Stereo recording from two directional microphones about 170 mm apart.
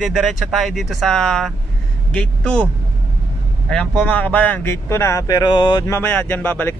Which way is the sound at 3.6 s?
5° left (ahead or behind).